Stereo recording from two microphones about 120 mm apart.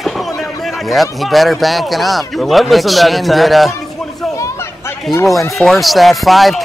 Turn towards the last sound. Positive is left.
turn(degrees=0)  # may be behind; listen again after turning